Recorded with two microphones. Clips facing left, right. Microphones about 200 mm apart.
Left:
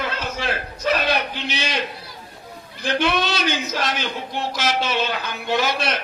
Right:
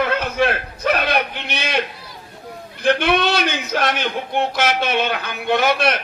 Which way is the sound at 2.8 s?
60° right (ahead or behind).